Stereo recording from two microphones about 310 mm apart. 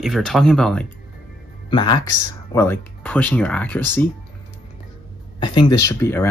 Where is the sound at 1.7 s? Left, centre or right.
Centre.